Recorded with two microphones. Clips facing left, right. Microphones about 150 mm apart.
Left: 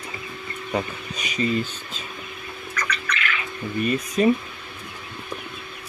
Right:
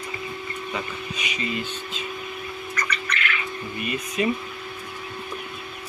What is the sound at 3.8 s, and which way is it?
Speech, 40° left (ahead or behind).